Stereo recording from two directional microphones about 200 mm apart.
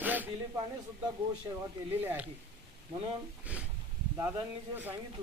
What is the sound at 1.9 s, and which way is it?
Speech, 10° right (ahead or behind).